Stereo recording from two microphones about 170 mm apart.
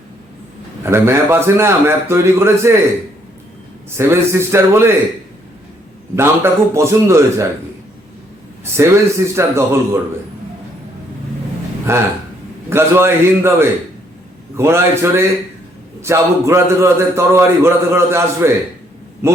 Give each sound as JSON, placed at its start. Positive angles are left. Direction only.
{"t": 0.9, "sound": "a man's voice", "side_deg": -15}
{"t": 3.9, "sound": "a man's voice", "side_deg": -15}
{"t": 6.1, "sound": "a man's voice", "side_deg": -15}
{"t": 8.6, "sound": "a man's voice", "side_deg": -15}
{"t": 11.9, "sound": "a man's voice", "side_deg": -15}